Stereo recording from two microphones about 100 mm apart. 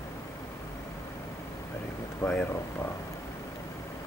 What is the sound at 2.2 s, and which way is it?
Speech, 30° left (ahead or behind).